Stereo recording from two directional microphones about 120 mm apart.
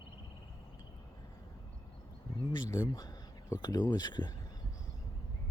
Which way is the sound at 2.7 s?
30° left (ahead or behind).